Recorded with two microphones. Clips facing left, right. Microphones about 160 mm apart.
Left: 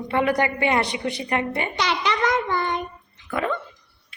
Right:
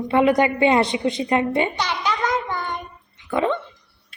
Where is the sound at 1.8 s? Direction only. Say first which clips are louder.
Left 1 dB; 85° left.